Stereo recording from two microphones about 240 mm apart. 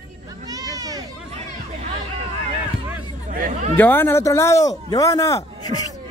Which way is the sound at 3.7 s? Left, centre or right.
Centre.